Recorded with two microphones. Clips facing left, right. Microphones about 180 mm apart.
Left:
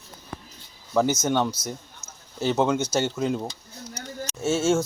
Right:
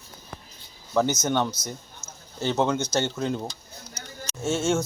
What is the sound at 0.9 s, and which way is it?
Speech, centre (ahead or behind).